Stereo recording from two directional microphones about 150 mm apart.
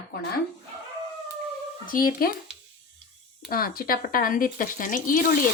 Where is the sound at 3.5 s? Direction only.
75° left (ahead or behind).